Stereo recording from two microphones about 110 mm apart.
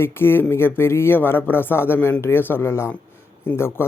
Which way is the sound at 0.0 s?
20° left (ahead or behind).